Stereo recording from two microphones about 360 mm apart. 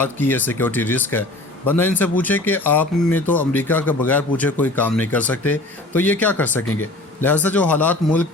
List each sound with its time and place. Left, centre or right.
0.0 s speech: centre
6.6 s speech: left
7.2 s speech: centre